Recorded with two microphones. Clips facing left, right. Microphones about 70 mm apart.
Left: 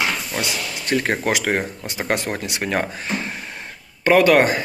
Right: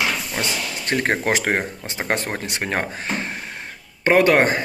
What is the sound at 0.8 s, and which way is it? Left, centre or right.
Speech, right.